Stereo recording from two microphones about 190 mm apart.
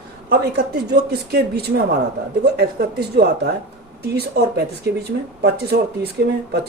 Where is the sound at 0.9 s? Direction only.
60° right (ahead or behind).